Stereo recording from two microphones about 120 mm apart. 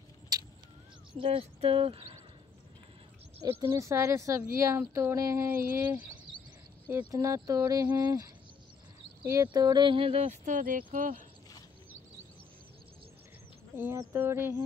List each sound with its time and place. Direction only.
0.3 s vehicle: 35° right (ahead or behind)
1.2 s speech: 50° right (ahead or behind)
3.4 s speech: 25° right (ahead or behind); by 11.2 s 90° right
13.7 s speech: 20° right (ahead or behind)